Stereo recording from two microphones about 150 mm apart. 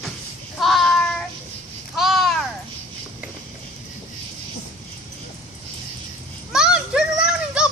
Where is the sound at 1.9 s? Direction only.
Centre (ahead or behind).